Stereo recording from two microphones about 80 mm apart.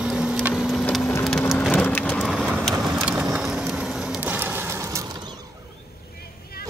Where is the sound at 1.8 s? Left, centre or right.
Left.